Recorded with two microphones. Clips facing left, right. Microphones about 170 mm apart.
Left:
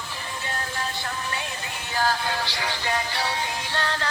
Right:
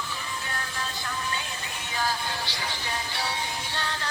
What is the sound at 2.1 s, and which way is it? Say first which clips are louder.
Music: left 5 dB; 75° left (ahead or behind).